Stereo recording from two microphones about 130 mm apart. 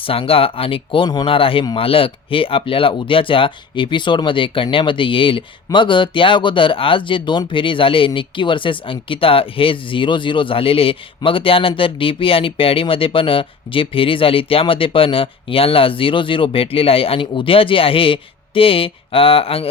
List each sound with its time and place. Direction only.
0.0 s speech: 45° left (ahead or behind)